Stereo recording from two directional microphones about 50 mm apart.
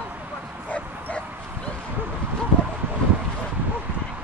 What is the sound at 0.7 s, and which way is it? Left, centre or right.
Bow-wow, left.